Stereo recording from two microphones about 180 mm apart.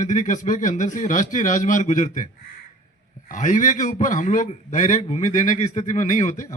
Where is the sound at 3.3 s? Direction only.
45° left (ahead or behind).